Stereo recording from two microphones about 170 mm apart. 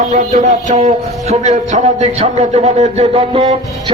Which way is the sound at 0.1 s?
50° right (ahead or behind).